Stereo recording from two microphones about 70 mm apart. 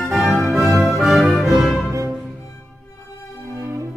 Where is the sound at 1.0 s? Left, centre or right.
Centre.